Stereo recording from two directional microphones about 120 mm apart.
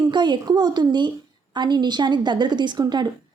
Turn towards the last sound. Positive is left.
turn(degrees=-35)  # may be behind; listen again after turning